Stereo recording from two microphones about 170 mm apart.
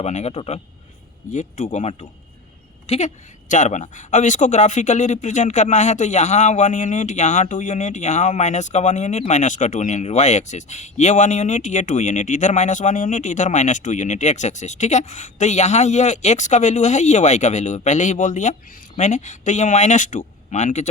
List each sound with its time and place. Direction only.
0.0 s a man's voice: 40° left (ahead or behind)